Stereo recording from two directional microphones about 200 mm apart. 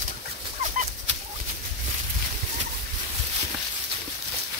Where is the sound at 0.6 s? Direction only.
35° right (ahead or behind).